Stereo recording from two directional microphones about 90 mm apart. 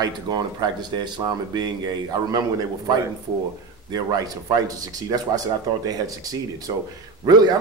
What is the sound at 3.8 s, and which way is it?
A man's voice, 45° right (ahead or behind).